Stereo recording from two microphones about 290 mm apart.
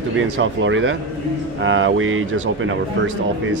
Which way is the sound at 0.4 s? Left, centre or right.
Right.